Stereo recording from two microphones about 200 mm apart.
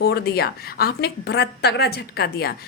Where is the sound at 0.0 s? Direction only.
55° left (ahead or behind).